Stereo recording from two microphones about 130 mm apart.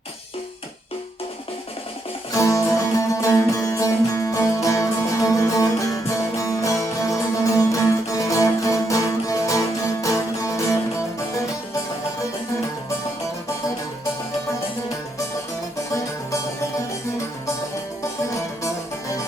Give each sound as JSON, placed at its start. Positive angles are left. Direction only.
{"t": 2.3, "sound": "music", "side_deg": 25}
{"t": 15.9, "sound": "music", "side_deg": 25}
{"t": 18.0, "sound": "music", "side_deg": 25}